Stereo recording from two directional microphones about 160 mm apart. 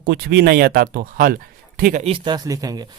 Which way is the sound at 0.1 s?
85° right.